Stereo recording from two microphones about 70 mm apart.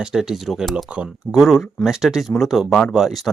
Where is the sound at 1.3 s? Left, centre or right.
Centre.